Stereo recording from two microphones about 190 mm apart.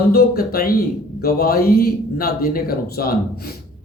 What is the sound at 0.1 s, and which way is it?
Speech, 55° left (ahead or behind).